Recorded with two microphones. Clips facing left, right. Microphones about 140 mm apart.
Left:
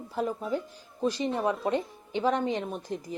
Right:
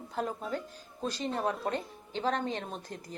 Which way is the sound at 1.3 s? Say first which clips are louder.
Left 4 dB; centre (ahead or behind).